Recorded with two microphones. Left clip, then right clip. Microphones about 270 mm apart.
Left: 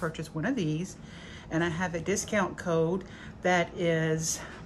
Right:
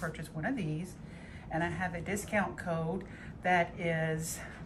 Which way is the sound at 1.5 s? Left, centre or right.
Centre.